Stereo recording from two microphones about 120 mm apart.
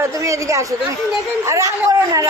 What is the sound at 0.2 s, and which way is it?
A man's voice, 25° right (ahead or behind).